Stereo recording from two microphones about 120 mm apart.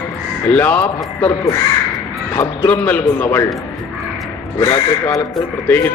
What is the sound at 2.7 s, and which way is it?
Speech, 15° left (ahead or behind).